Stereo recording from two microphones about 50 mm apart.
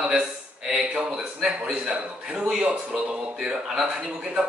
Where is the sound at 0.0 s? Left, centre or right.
Centre.